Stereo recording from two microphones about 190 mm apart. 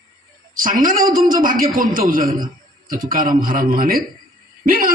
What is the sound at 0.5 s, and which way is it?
A woman's voice, 45° right (ahead or behind).